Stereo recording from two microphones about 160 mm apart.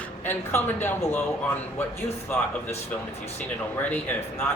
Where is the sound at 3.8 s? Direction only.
10° left (ahead or behind).